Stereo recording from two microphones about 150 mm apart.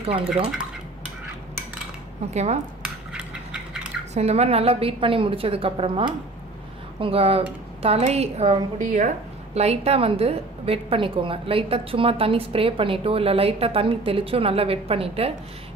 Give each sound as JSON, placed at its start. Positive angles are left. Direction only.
{"t": 0.0, "sound": "speech", "side_deg": -40}
{"t": 2.3, "sound": "a woman's voice", "side_deg": -50}
{"t": 2.8, "sound": "a sound", "side_deg": -5}
{"t": 4.1, "sound": "a woman's voice", "side_deg": -45}
{"t": 8.8, "sound": "speech", "side_deg": -55}
{"t": 9.6, "sound": "a woman's voice", "side_deg": -45}